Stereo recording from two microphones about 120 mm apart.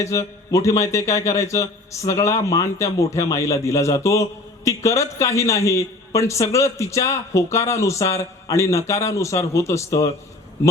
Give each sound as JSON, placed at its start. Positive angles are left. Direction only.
{"t": 0.0, "sound": "speech", "side_deg": 25}